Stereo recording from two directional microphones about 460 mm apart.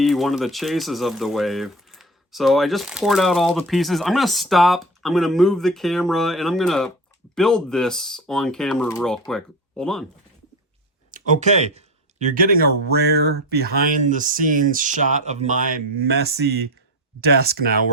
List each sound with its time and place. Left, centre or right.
0.0 s speech: centre
11.1 s speech: centre
17.2 s speech: centre